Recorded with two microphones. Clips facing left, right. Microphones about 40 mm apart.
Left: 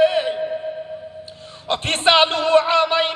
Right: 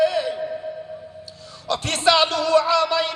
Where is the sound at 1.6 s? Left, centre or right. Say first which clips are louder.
Left 2 dB; left.